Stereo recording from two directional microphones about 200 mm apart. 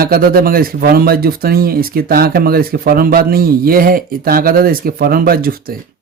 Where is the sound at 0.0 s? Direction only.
50° right (ahead or behind).